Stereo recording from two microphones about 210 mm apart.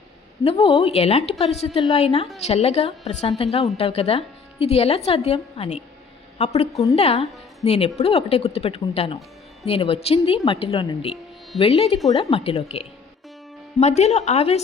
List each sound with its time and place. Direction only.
0.4 s a woman's voice: 25° left (ahead or behind)